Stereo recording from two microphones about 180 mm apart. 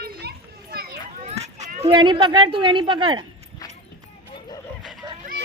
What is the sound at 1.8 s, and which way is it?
Speech, 25° right (ahead or behind).